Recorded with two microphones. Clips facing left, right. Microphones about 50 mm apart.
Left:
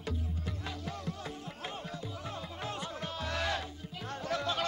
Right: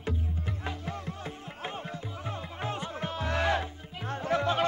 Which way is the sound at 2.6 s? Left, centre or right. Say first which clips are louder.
Right 5 dB; right.